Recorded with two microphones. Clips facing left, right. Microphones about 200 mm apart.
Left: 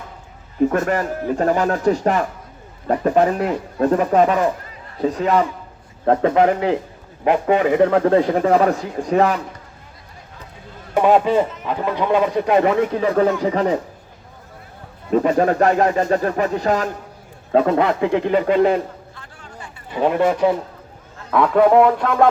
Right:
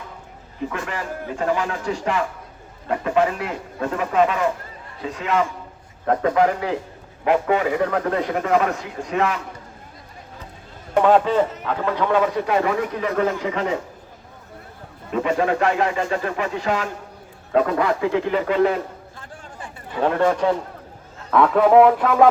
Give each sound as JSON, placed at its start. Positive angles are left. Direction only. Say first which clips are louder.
{"t": 0.7, "sound": "a man's voice", "louder": "left 9 dB", "side_deg": 40}
{"t": 6.1, "sound": "a man's voice", "louder": "left 3 dB", "side_deg": 25}
{"t": 11.0, "sound": "a man's voice", "louder": "left 2 dB", "side_deg": 10}
{"t": 15.1, "sound": "a man's voice", "louder": "left 4 dB", "side_deg": 40}
{"t": 17.5, "sound": "a man's voice", "louder": "left 3 dB", "side_deg": 25}
{"t": 19.1, "sound": "a sound", "louder": "right 1 dB", "side_deg": -50}
{"t": 19.9, "sound": "a man's voice", "louder": "left 2 dB", "side_deg": 15}